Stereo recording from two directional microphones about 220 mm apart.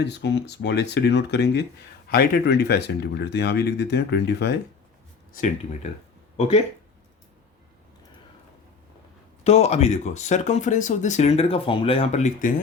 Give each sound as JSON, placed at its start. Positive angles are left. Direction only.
{"t": 0.0, "sound": "speech", "side_deg": 50}
{"t": 5.3, "sound": "speech", "side_deg": 35}
{"t": 9.4, "sound": "speech", "side_deg": 30}